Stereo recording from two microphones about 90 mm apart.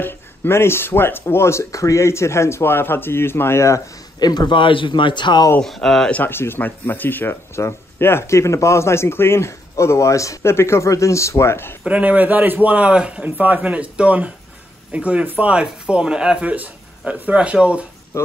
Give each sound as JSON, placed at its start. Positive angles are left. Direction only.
{"t": 0.0, "sound": "speech", "side_deg": 25}
{"t": 4.2, "sound": "speech", "side_deg": 50}
{"t": 5.6, "sound": "speech", "side_deg": 5}
{"t": 6.1, "sound": "speech", "side_deg": 25}
{"t": 11.8, "sound": "speech", "side_deg": -15}
{"t": 18.1, "sound": "speech", "side_deg": 30}